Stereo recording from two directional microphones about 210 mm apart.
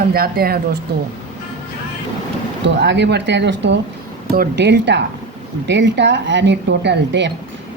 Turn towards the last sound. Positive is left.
turn(degrees=-55)  # may be behind; listen again after turning